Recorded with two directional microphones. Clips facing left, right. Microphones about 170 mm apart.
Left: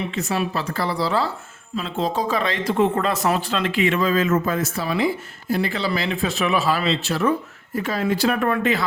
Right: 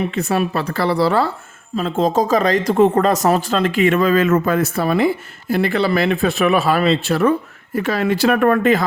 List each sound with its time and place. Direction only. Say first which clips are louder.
0.1 s speech: right 5 dB; 55° right (ahead or behind)
1.7 s speech: right 7 dB; 45° right (ahead or behind)